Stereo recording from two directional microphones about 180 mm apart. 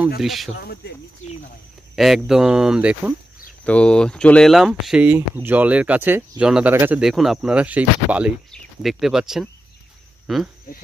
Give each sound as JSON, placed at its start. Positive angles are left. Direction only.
{"t": 0.2, "sound": "speech", "side_deg": 0}
{"t": 0.6, "sound": "speech", "side_deg": 60}
{"t": 2.0, "sound": "speech", "side_deg": 0}
{"t": 3.6, "sound": "speech", "side_deg": 5}
{"t": 7.0, "sound": "speech", "side_deg": 0}